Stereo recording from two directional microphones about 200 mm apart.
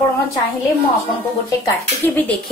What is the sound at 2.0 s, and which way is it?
Speech, 5° left (ahead or behind).